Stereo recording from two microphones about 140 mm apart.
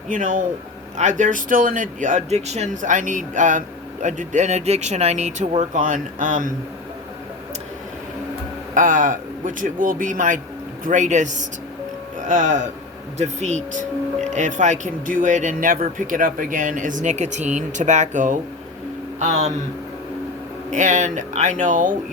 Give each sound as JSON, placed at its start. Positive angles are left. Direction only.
{"t": 0.1, "sound": "speech", "side_deg": -65}
{"t": 8.7, "sound": "a man's voice", "side_deg": -70}
{"t": 20.7, "sound": "speech", "side_deg": -60}